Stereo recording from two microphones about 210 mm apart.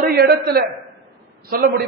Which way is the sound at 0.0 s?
50° right (ahead or behind).